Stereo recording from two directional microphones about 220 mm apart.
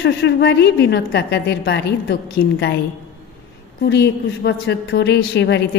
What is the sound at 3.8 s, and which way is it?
A woman's voice, 50° left (ahead or behind).